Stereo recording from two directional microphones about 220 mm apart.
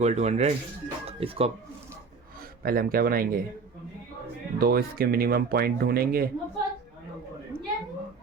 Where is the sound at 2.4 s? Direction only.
40° right (ahead or behind).